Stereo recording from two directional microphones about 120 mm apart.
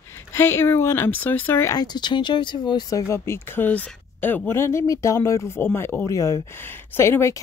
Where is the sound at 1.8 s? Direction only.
35° left (ahead or behind).